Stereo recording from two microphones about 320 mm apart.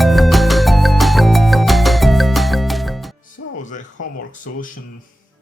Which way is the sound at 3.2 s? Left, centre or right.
Left.